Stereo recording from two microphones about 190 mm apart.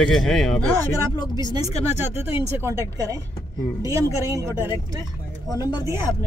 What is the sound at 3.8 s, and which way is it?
Speech, 15° right (ahead or behind).